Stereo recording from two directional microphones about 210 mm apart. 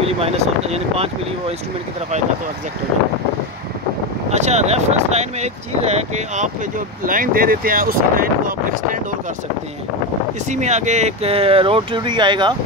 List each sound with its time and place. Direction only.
0.0 s speech: 30° right (ahead or behind)
4.3 s speech: 30° right (ahead or behind)
10.5 s speech: 35° right (ahead or behind)